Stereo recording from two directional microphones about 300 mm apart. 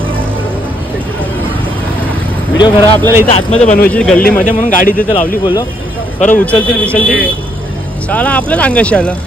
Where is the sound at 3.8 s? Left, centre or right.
Centre.